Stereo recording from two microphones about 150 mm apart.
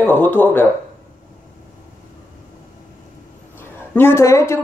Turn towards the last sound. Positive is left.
turn(degrees=20)  # may be behind; listen again after turning